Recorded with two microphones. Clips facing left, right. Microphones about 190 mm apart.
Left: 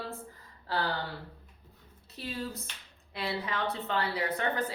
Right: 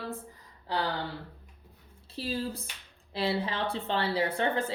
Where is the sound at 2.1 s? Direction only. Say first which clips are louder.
Right 4 dB; 30° right (ahead or behind).